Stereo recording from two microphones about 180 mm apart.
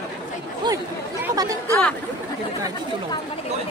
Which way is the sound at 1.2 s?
20° right (ahead or behind).